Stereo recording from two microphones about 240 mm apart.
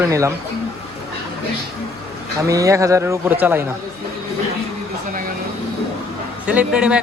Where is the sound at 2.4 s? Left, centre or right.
Centre.